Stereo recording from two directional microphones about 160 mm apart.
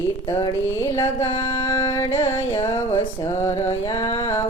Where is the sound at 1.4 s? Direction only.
20° left (ahead or behind).